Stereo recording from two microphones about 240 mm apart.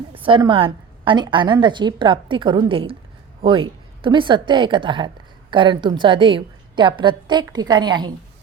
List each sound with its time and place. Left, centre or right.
0.1 s a woman's voice: right